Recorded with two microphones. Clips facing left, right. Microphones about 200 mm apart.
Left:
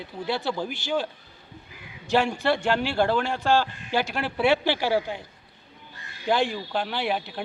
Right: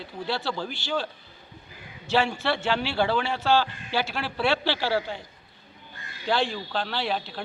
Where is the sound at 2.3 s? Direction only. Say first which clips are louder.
Left 3 dB; 15° left (ahead or behind).